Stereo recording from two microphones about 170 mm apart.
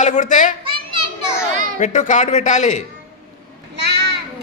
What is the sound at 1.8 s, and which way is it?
A man's voice, 45° left (ahead or behind).